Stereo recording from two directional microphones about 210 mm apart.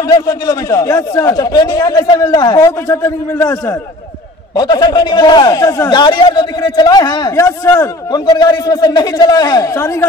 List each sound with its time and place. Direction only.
0.1 s a man's voice: 15° left (ahead or behind)